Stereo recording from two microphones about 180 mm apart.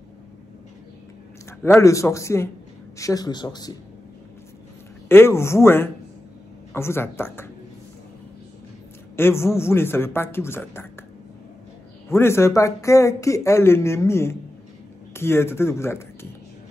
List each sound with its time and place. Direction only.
1.8 s speech: 15° left (ahead or behind)
5.0 s speech: 15° left (ahead or behind)
9.1 s a man's voice: 15° left (ahead or behind)
12.1 s speech: 15° left (ahead or behind)